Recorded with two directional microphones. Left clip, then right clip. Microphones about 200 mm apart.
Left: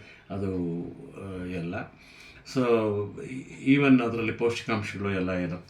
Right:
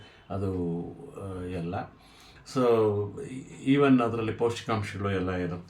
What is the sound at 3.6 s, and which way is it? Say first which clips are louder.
Speech: left 1 dB; 15° right (ahead or behind).